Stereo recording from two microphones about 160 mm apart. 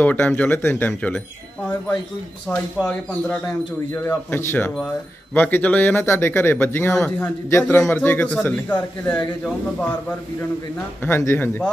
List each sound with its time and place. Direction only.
0.0 s speech: 10° left (ahead or behind)
2.9 s speech: 10° left (ahead or behind)
7.0 s speech: 5° left (ahead or behind)
7.4 s speech: 15° left (ahead or behind)
11.1 s speech: 15° left (ahead or behind)